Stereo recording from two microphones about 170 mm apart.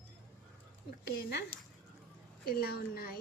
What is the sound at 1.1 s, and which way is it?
Speech, 65° left (ahead or behind).